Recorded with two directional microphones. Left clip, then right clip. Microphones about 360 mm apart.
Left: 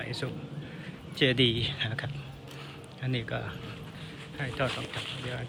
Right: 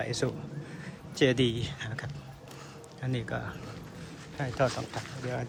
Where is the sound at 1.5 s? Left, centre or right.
Right.